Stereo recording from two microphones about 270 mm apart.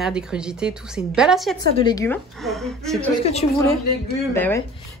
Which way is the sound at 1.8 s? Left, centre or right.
Centre.